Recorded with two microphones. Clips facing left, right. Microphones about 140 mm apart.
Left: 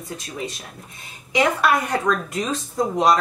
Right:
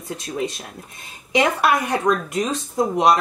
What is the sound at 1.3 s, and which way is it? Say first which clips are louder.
Speech: right 1 dB; 20° right (ahead or behind).